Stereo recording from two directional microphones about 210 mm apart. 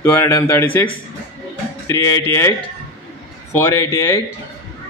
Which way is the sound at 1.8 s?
15° left (ahead or behind).